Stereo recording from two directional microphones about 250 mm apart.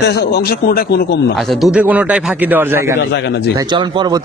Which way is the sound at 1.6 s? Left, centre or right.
Centre.